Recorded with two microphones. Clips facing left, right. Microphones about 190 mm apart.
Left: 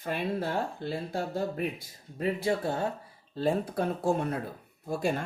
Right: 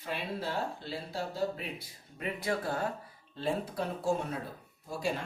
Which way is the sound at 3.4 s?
45° left (ahead or behind).